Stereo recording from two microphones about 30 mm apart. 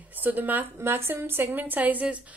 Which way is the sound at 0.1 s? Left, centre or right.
Right.